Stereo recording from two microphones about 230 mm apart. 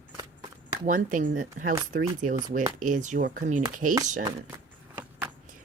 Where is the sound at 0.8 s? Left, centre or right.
Right.